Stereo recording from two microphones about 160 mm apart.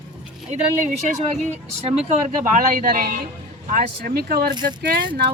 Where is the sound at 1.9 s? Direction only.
40° right (ahead or behind).